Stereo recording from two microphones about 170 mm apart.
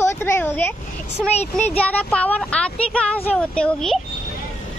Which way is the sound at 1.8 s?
5° left (ahead or behind).